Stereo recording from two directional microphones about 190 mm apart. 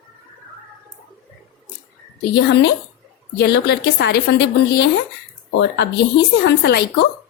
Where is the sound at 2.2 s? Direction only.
65° left (ahead or behind).